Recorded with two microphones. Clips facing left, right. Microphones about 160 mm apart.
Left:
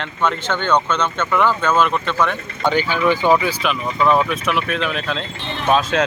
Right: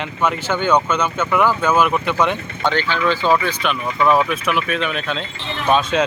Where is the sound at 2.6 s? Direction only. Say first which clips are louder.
Left 2 dB; 10° left (ahead or behind).